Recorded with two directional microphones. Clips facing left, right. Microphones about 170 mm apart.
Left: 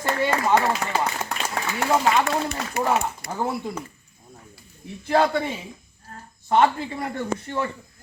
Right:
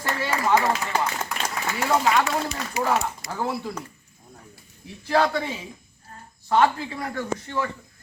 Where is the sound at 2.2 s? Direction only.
55° left (ahead or behind).